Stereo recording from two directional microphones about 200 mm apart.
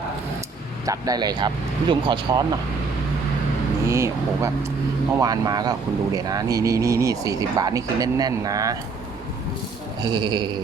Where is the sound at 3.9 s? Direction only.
15° right (ahead or behind).